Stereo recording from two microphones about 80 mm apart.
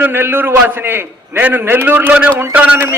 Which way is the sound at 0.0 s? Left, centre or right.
Right.